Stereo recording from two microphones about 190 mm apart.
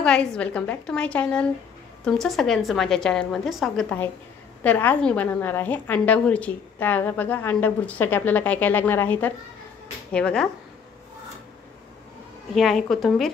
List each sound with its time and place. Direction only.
0.0 s a woman's voice: 5° left (ahead or behind)
12.5 s a woman's voice: centre (ahead or behind)